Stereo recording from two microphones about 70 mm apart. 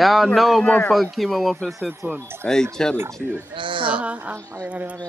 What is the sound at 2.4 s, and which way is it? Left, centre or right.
Speech, centre.